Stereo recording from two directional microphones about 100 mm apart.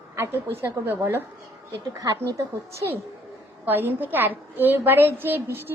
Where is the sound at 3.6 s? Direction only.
20° right (ahead or behind).